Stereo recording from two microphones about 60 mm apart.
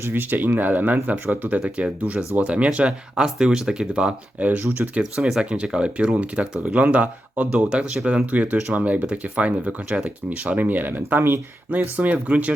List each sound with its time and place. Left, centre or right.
0.1 s speech: right